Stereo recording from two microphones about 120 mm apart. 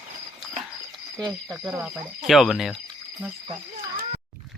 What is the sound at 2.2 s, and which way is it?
Speech, centre (ahead or behind).